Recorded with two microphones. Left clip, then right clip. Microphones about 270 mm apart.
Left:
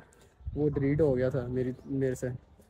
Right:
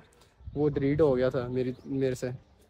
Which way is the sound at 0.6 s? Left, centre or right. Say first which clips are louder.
Right 2 dB; centre.